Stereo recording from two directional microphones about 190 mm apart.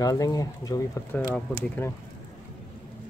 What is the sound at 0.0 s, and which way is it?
Speech, 20° left (ahead or behind).